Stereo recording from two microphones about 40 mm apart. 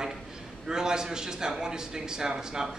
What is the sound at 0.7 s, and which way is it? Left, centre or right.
A man's voice, centre.